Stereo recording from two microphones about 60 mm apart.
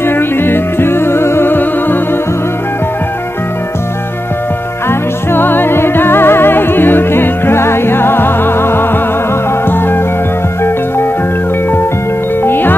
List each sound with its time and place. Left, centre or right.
0.0 s music: left
4.8 s music: left
12.4 s music: left